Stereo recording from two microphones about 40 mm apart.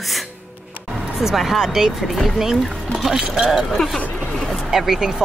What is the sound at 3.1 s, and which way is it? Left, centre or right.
Speech, centre.